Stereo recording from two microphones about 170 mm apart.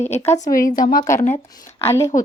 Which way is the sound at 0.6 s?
55° left (ahead or behind).